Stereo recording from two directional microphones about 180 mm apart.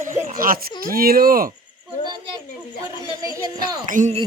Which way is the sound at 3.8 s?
45° right (ahead or behind).